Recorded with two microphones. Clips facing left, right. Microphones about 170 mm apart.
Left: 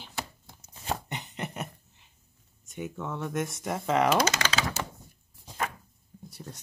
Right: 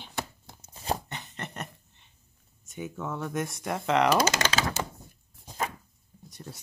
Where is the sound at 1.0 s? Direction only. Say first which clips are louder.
Left 3 dB; 15° left (ahead or behind).